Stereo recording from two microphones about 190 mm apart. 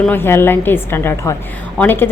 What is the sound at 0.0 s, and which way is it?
A woman's voice, 10° left (ahead or behind).